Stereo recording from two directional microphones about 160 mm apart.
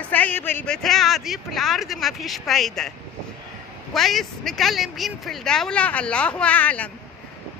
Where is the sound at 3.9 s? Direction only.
Centre (ahead or behind).